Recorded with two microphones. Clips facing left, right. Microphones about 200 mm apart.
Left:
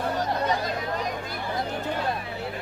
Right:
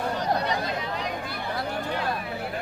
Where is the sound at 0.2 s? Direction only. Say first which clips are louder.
Even; 45° left (ahead or behind).